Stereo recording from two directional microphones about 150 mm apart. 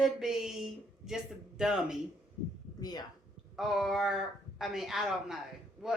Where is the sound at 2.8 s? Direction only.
25° left (ahead or behind).